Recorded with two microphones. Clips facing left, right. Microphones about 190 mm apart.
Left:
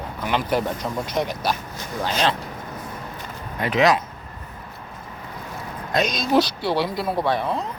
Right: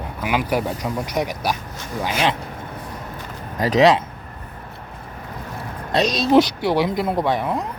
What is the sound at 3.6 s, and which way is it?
Speech, 35° right (ahead or behind).